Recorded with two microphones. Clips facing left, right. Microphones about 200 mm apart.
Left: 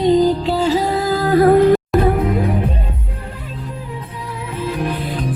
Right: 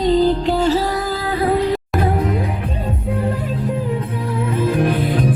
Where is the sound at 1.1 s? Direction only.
45° left (ahead or behind).